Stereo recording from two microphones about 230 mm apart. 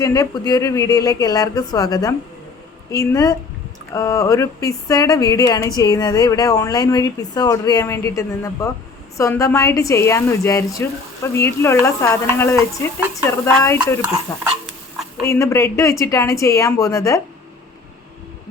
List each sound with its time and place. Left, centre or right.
0.0 s speech: centre
15.3 s speech: centre